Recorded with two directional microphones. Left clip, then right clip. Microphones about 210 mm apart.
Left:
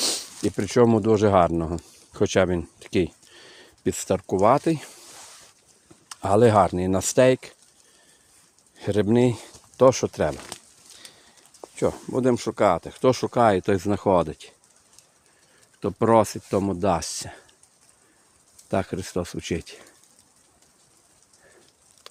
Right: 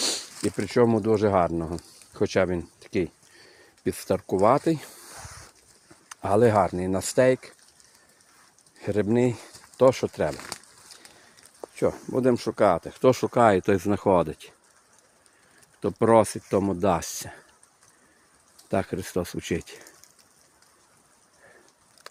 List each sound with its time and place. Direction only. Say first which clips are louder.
0.0 s speech: left 2 dB; 15° left (ahead or behind); by 3.9 s 35° left (ahead or behind)
3.9 s speech: left 1 dB; 15° left (ahead or behind)
6.1 s speech: left 2 dB; 20° left (ahead or behind)
8.8 s speech: left 3 dB; 25° left (ahead or behind)
11.7 s speech: left 1 dB; 10° left (ahead or behind)
15.8 s speech: even; 5° left (ahead or behind)
18.7 s speech: left 1 dB; 5° left (ahead or behind)
22.0 s a sound: right 1 dB; 10° right (ahead or behind)